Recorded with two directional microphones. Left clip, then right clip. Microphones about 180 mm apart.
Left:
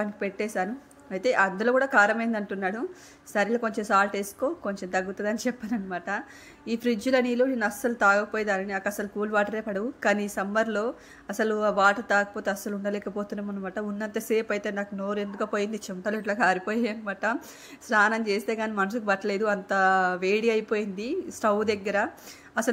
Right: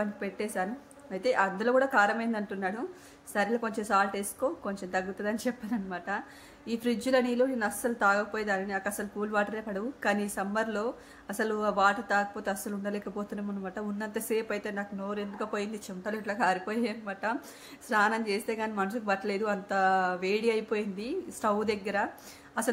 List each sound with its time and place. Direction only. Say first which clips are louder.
0.0 s a woman's voice: left 4 dB; 25° left (ahead or behind)